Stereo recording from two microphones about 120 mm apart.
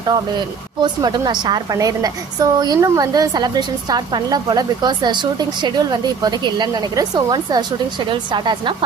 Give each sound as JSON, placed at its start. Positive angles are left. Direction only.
{"t": 0.1, "sound": "a woman's voice", "side_deg": -35}